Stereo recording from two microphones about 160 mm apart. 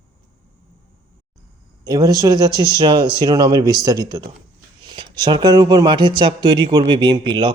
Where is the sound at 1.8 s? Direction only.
25° right (ahead or behind).